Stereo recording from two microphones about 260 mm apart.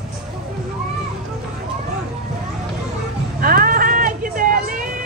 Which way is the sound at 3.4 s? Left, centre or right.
Right.